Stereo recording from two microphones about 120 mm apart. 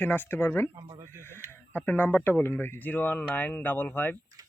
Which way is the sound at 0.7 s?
45° right (ahead or behind).